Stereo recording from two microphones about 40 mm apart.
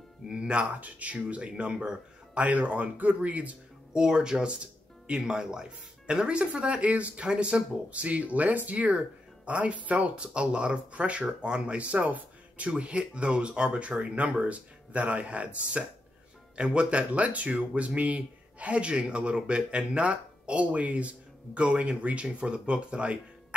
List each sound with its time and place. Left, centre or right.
0.3 s speech: right
0.7 s speech: right
2.4 s speech: right
3.9 s speech: right
6.4 s speech: right